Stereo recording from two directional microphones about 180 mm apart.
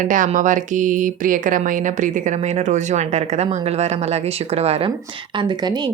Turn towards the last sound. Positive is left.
turn(degrees=-25)  # may be behind; listen again after turning